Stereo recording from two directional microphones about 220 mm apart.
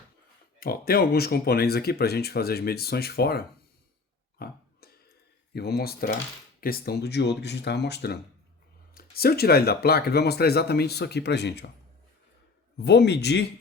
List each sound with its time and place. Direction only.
0.6 s speech: 45° left (ahead or behind)
4.4 s burping: 45° left (ahead or behind)
5.5 s speech: 45° left (ahead or behind)
12.8 s speech: 50° left (ahead or behind)